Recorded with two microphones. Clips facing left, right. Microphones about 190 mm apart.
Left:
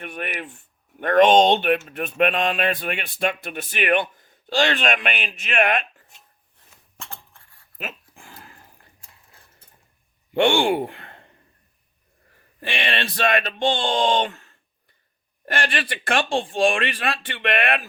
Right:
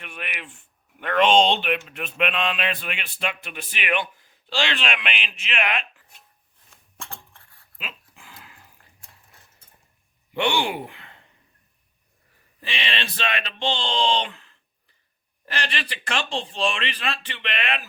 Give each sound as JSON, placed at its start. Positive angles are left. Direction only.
{"t": 0.0, "sound": "speech", "side_deg": 45}
{"t": 7.8, "sound": "dog", "side_deg": 50}
{"t": 10.3, "sound": "speech", "side_deg": 50}
{"t": 12.5, "sound": "speech", "side_deg": 55}
{"t": 15.5, "sound": "speech", "side_deg": 50}